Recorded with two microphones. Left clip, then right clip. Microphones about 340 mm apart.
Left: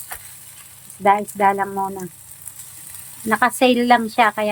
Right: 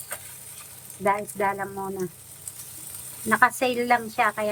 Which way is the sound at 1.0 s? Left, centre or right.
Centre.